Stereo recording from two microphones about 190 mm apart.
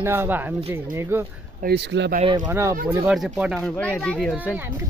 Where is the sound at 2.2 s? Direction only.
20° right (ahead or behind).